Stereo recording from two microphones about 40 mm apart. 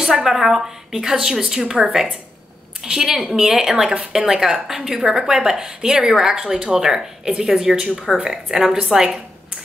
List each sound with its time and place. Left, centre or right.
0.0 s a woman's voice: centre